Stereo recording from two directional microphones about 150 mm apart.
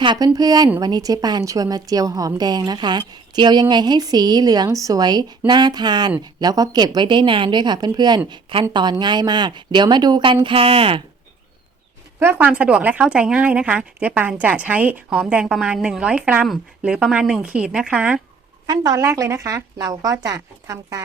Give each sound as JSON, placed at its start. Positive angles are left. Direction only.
{"t": 0.0, "sound": "a woman's voice", "side_deg": -30}
{"t": 12.2, "sound": "a woman's voice", "side_deg": -15}
{"t": 18.6, "sound": "a woman's voice", "side_deg": -25}